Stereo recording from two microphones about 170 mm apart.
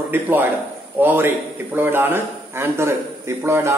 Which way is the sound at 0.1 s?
10° right (ahead or behind).